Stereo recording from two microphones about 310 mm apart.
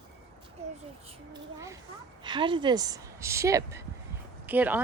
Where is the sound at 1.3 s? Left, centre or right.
Centre.